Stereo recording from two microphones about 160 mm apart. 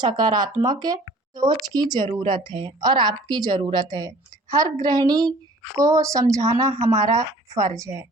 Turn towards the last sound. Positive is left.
turn(degrees=-20)  # may be behind; listen again after turning